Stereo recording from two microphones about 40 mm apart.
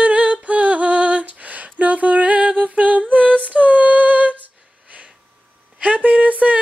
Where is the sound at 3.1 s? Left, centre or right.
Right.